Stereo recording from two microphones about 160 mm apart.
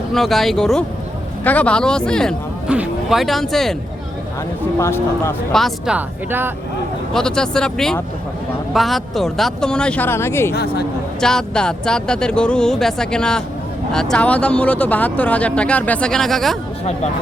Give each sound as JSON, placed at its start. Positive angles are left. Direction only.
{"t": 0.1, "sound": "speech", "side_deg": 0}
{"t": 2.6, "sound": "speech", "side_deg": -5}
{"t": 4.8, "sound": "speech", "side_deg": 15}
{"t": 5.5, "sound": "speech", "side_deg": 0}
{"t": 7.1, "sound": "speech", "side_deg": 5}
{"t": 10.5, "sound": "speech", "side_deg": 85}
{"t": 11.2, "sound": "speech", "side_deg": 5}